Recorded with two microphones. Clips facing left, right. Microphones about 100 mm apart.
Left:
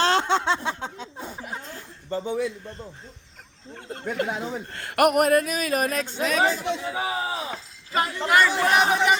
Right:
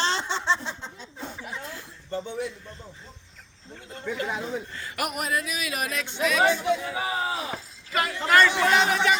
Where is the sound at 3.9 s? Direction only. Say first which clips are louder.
Left 3 dB; 55° left (ahead or behind).